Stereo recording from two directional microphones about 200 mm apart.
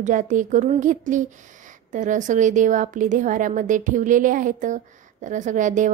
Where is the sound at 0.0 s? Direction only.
40° right (ahead or behind).